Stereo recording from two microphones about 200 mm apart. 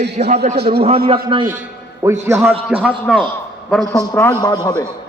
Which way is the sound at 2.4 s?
Centre (ahead or behind).